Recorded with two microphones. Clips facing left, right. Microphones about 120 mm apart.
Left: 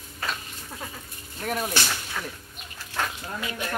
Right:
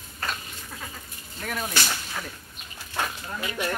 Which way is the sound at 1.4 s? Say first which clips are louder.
Left 3 dB; 10° left (ahead or behind).